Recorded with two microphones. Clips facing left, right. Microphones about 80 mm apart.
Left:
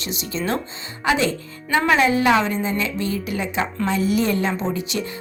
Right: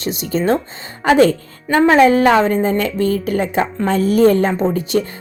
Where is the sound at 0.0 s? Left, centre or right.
Right.